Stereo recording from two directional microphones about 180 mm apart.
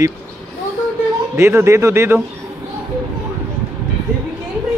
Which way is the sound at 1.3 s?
15° right (ahead or behind).